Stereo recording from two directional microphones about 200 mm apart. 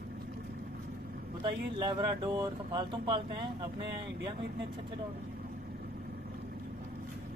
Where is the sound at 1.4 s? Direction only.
20° right (ahead or behind).